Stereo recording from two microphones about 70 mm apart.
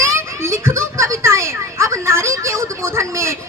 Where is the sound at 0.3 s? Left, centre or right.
Right.